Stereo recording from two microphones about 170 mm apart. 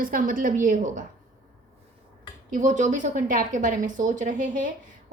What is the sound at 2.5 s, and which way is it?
A woman's voice, 45° right (ahead or behind).